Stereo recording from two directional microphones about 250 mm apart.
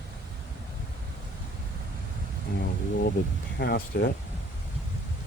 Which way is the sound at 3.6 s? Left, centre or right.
Left.